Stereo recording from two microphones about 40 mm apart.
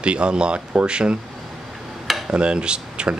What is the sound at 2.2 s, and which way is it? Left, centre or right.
Speech, right.